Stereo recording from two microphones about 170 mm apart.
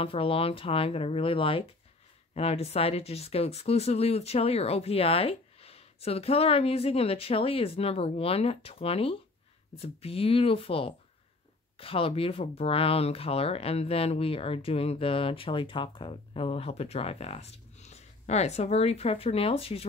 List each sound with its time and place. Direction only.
0.0 s speech: 35° left (ahead or behind)